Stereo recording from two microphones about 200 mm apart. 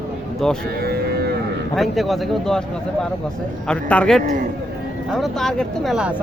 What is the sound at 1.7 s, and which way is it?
Speech, centre (ahead or behind).